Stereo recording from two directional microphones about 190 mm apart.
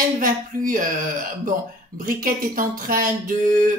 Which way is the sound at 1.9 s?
45° right (ahead or behind).